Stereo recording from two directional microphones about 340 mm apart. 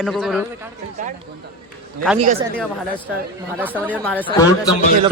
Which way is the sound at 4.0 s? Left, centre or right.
Centre.